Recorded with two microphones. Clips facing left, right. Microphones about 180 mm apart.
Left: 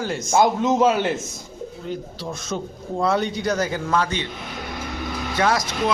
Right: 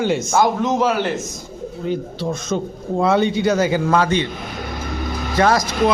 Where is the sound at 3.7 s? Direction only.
90° right.